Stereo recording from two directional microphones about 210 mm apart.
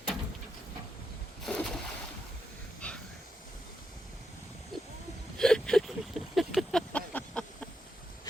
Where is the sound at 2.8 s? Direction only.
5° left (ahead or behind).